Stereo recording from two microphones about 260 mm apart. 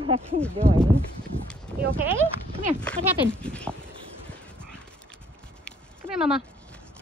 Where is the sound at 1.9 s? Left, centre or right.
Centre.